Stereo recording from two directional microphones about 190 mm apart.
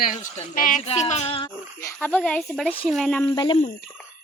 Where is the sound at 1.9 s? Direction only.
5° left (ahead or behind).